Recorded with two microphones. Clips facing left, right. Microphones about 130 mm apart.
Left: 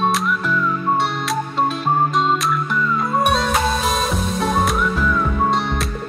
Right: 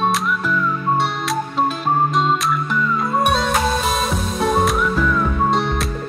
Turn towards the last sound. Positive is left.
turn(degrees=0)  # may be behind; listen again after turning